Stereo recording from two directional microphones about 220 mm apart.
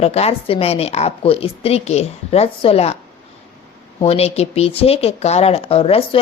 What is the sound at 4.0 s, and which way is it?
A woman's voice, 30° left (ahead or behind).